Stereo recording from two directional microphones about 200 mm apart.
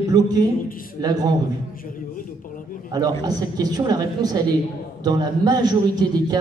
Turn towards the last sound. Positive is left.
turn(degrees=-20)  # may be behind; listen again after turning